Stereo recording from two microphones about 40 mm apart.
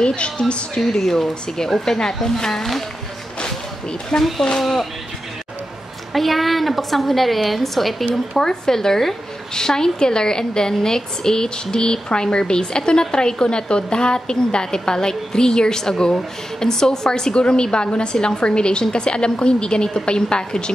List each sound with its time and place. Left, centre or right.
0.0 s a woman's voice: left
0.7 s speech: centre
4.2 s a woman's voice: centre
6.1 s a woman's voice: centre
8.1 s a woman's voice: centre